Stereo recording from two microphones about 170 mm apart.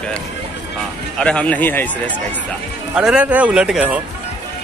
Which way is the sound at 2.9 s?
5° right (ahead or behind).